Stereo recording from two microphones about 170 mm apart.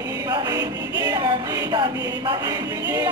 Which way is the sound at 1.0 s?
20° right (ahead or behind).